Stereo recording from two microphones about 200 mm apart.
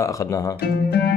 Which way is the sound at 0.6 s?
55° left (ahead or behind).